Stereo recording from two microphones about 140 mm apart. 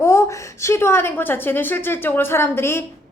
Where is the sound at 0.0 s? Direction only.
20° left (ahead or behind).